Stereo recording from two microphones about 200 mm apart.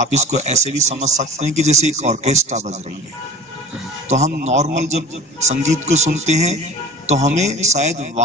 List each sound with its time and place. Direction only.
0.0 s a man's voice: 35° right (ahead or behind)
4.1 s a man's voice: 40° right (ahead or behind)